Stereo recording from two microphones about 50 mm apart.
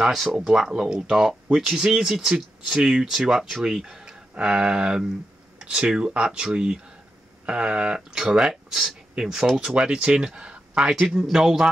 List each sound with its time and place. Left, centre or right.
0.0 s speech: centre; by 10.9 s right
10.9 s speech: centre